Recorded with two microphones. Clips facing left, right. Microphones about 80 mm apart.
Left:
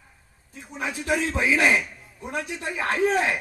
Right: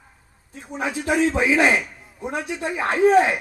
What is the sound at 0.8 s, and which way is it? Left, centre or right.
A man's voice, right.